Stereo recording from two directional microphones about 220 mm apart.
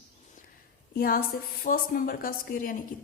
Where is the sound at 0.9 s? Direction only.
40° left (ahead or behind).